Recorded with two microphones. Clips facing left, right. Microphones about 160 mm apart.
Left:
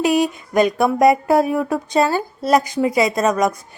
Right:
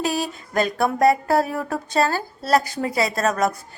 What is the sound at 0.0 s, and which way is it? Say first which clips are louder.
A woman's voice: left 7 dB; 20° left (ahead or behind).